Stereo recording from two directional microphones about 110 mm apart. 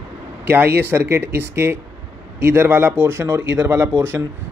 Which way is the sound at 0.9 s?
20° right (ahead or behind).